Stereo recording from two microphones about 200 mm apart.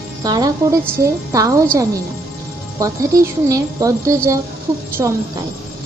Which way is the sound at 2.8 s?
15° right (ahead or behind).